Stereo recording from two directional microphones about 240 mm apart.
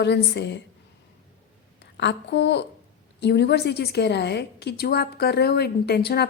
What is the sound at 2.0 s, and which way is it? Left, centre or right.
A woman's voice, left.